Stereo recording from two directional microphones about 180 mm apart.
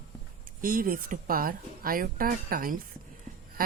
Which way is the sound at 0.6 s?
50° right (ahead or behind).